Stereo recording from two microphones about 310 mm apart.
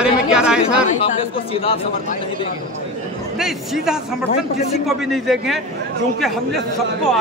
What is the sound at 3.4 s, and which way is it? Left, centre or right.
A man's voice, centre.